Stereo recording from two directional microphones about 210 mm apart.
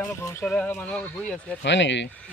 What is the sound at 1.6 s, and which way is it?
Speech, 55° left (ahead or behind).